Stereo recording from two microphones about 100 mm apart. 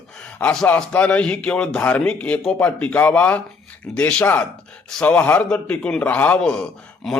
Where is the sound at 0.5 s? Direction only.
5° left (ahead or behind).